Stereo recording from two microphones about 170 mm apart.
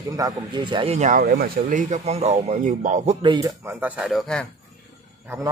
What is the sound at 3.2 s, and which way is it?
Speech, 25° right (ahead or behind).